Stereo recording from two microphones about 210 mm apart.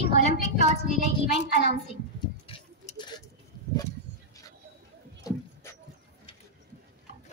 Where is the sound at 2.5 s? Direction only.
25° left (ahead or behind).